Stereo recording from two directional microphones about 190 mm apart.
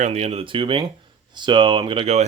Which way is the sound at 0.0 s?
35° right (ahead or behind).